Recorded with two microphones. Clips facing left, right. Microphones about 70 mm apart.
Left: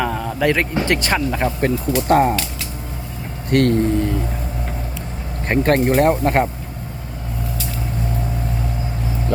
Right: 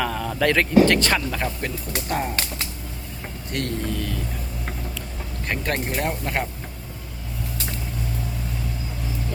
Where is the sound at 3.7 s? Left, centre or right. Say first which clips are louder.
Left 10 dB; left.